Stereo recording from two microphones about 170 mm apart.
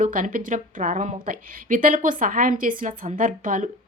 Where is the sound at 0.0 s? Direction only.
55° right (ahead or behind).